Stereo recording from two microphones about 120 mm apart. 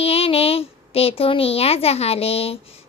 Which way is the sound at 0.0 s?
55° left (ahead or behind).